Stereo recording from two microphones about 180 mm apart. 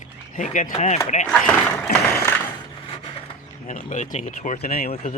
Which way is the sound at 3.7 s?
45° left (ahead or behind).